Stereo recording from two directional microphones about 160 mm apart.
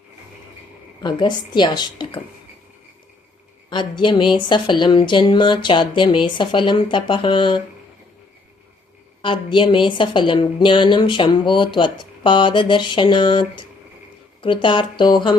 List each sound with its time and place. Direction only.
1.0 s a woman's voice: 30° left (ahead or behind)
3.7 s a woman's voice: 30° left (ahead or behind)
9.2 s a woman's voice: 30° left (ahead or behind)